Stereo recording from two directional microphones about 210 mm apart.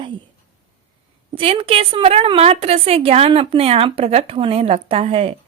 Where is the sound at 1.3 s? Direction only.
25° right (ahead or behind).